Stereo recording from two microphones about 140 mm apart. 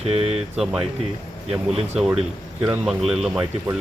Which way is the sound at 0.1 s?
45° right (ahead or behind).